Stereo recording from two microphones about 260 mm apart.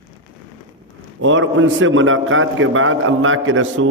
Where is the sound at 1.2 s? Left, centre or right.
Right.